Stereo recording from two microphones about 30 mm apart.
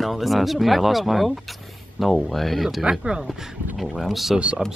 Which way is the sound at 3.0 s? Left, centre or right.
Right.